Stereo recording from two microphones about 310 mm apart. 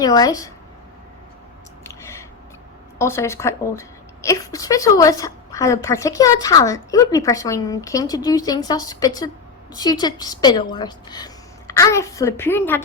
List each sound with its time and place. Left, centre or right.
0.0 s a woman's voice: centre
1.8 s chewing: centre
3.0 s a woman's voice: centre